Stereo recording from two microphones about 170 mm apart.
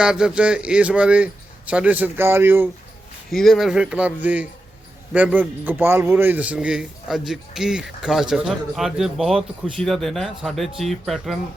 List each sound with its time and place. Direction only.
0.0 s speech: 5° right (ahead or behind)
3.3 s a man's voice: centre (ahead or behind)